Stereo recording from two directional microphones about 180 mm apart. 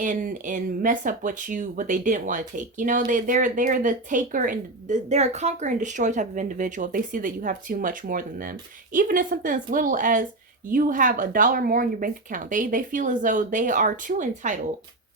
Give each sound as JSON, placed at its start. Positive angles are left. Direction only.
{"t": 0.0, "sound": "speech", "side_deg": -45}